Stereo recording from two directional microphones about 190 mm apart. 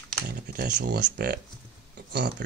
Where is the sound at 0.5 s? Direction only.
55° right (ahead or behind).